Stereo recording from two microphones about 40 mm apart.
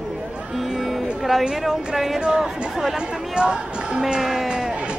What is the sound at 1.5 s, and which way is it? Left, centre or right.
Speech, centre.